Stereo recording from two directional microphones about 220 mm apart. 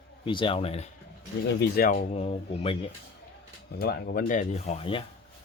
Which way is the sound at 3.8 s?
40° left (ahead or behind).